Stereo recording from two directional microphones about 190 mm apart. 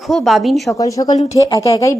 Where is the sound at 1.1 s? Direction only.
35° left (ahead or behind).